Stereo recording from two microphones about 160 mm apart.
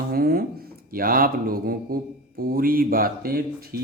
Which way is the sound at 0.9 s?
65° right (ahead or behind).